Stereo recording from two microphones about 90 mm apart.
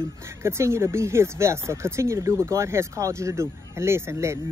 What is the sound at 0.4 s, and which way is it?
Speech, 30° right (ahead or behind).